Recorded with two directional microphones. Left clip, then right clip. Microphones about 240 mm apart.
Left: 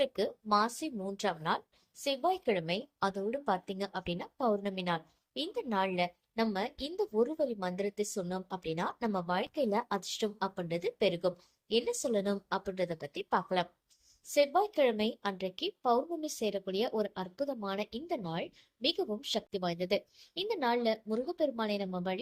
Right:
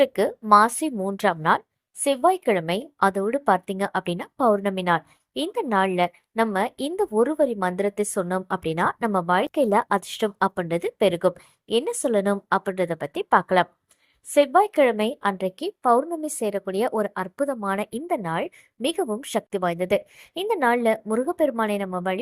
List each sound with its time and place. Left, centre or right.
0.0 s a woman's voice: right